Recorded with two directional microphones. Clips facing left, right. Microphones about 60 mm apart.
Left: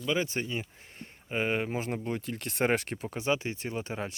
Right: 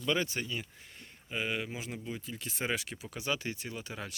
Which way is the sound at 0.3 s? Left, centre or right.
Left.